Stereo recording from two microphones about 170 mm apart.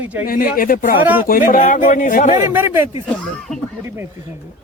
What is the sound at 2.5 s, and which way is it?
Speech, 15° right (ahead or behind).